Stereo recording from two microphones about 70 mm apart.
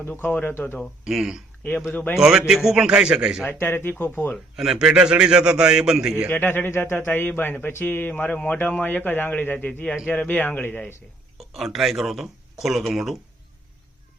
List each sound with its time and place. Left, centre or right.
0.2 s a man's voice: left
1.0 s speech: centre
1.9 s a man's voice: left
2.1 s a man's voice: centre
3.6 s speech: left
4.5 s a man's voice: centre
6.2 s a man's voice: left
11.3 s speech: centre